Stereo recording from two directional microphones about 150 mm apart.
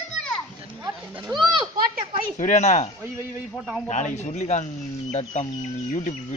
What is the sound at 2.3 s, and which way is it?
Speech, 50° left (ahead or behind).